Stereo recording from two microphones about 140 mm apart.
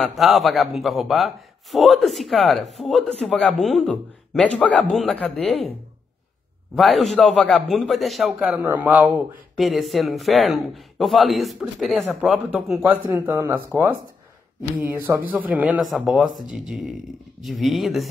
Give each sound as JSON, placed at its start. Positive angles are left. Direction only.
{"t": 0.0, "sound": "a man's voice", "side_deg": 0}
{"t": 6.7, "sound": "a man's voice", "side_deg": 0}
{"t": 8.5, "sound": "a man's voice", "side_deg": -15}
{"t": 12.9, "sound": "speech", "side_deg": -15}
{"t": 14.8, "sound": "a man's voice", "side_deg": -15}